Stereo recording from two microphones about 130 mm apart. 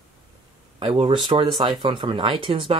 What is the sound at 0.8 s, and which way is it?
Speech, 40° right (ahead or behind).